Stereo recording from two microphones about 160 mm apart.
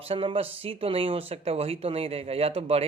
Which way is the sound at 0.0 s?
35° right (ahead or behind).